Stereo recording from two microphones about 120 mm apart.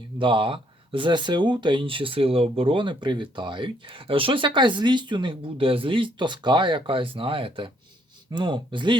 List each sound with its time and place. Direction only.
0.2 s speech: 45° right (ahead or behind)